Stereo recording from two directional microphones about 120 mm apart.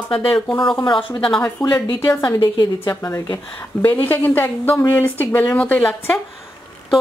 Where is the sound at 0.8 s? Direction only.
40° left (ahead or behind).